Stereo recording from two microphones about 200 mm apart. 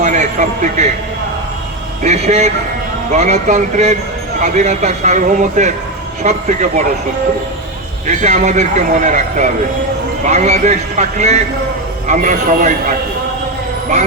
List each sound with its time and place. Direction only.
0.0 s a man's voice: 35° right (ahead or behind)
2.0 s speech: 35° right (ahead or behind)
8.0 s speech: 35° right (ahead or behind)